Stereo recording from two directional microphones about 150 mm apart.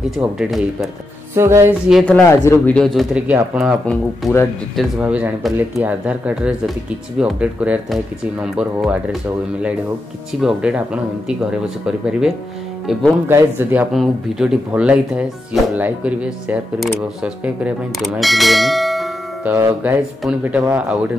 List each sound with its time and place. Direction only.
0.2 s speech: 5° right (ahead or behind)
1.3 s speech: 15° right (ahead or behind)
2.0 s speech: 10° left (ahead or behind); by 3.7 s 5° right (ahead or behind)
3.8 s speech: 5° left (ahead or behind)
5.0 s speech: 10° right (ahead or behind)
10.4 s speech: 5° right (ahead or behind)
13.3 s speech: 15° right (ahead or behind)
19.4 s speech: 15° right (ahead or behind)